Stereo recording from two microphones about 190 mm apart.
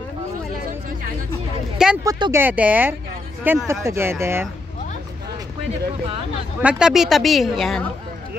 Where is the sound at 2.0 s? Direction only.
15° right (ahead or behind).